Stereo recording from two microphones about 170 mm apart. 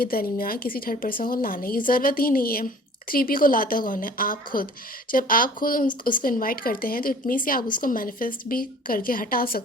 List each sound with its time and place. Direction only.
0.0 s a woman's voice: 60° left (ahead or behind)